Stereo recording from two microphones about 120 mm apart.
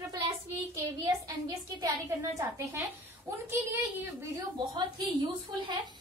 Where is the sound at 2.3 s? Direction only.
20° right (ahead or behind).